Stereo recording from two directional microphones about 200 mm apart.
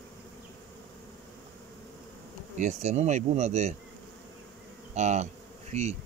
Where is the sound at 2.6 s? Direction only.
35° right (ahead or behind).